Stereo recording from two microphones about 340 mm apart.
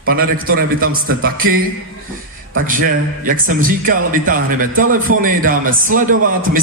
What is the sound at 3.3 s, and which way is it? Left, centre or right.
A man's voice, right.